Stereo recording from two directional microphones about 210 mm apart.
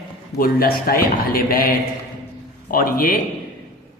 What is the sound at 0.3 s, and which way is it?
A man's voice, 45° left (ahead or behind).